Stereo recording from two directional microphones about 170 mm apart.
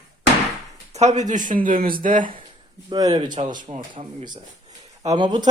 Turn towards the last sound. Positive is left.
turn(degrees=-25)  # may be behind; listen again after turning